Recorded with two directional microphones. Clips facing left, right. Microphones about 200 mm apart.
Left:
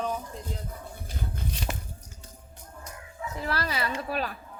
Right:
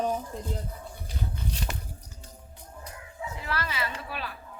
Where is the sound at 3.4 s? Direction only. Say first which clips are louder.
Left 3 dB; 35° left (ahead or behind).